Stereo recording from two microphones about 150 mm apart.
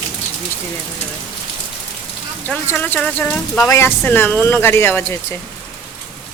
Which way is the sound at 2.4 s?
10° left (ahead or behind).